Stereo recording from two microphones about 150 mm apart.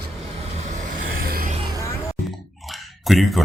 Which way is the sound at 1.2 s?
85° right.